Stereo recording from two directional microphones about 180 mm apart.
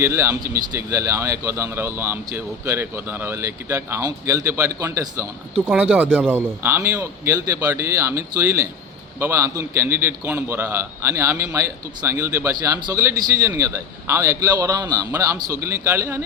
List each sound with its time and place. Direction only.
0.0 s speech: 15° right (ahead or behind)